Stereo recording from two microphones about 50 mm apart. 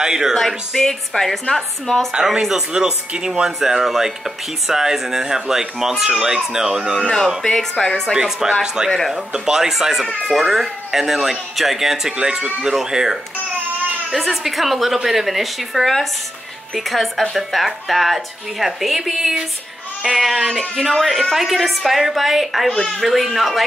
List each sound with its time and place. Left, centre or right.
0.0 s speech: centre
0.4 s a woman's voice: centre
2.1 s speech: centre
7.5 s a woman's voice: centre
8.1 s speech: centre